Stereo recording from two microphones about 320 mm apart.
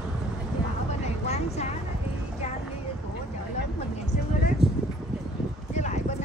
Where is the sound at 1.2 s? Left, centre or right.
Centre.